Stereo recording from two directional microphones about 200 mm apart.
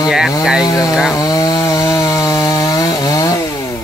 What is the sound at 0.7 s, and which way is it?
Speech, 15° left (ahead or behind).